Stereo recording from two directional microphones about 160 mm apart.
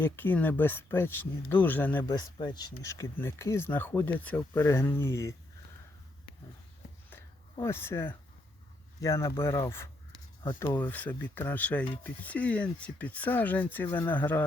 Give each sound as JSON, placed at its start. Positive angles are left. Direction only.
{"t": 0.0, "sound": "speech", "side_deg": 10}
{"t": 2.0, "sound": "speech", "side_deg": 25}
{"t": 7.6, "sound": "speech", "side_deg": 15}